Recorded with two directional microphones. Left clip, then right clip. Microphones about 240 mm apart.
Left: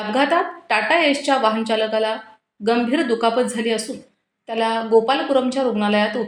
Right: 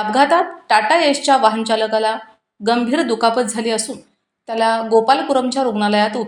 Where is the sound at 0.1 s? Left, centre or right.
Right.